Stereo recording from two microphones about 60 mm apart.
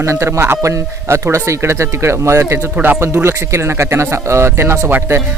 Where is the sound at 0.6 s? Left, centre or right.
Right.